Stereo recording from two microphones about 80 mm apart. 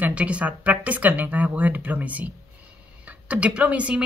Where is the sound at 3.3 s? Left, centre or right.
Centre.